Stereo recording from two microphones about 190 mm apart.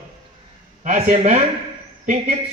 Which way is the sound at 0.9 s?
40° right (ahead or behind).